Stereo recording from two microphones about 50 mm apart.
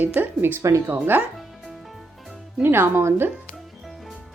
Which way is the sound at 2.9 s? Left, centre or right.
Right.